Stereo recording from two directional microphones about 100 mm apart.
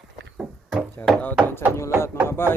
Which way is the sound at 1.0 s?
25° left (ahead or behind).